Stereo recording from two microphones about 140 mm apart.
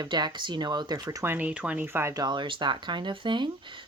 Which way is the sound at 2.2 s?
35° right (ahead or behind).